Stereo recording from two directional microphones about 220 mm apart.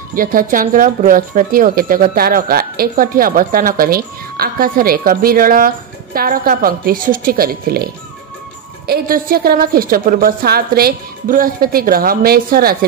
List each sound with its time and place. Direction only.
0.1 s speech: 40° right (ahead or behind)